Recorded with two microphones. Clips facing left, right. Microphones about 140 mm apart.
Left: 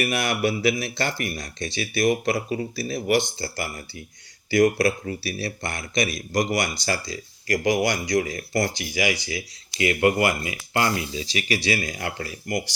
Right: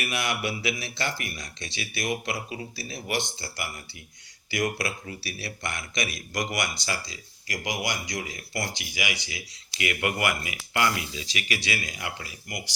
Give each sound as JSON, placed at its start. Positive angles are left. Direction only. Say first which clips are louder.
{"t": 0.0, "sound": "speech", "louder": "left 6 dB", "side_deg": 40}